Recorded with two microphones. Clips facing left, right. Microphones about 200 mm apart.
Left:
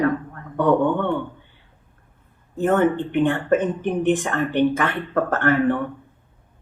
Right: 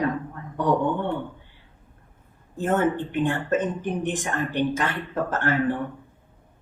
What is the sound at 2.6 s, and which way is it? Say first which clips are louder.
Speech: left 4 dB; 60° left (ahead or behind).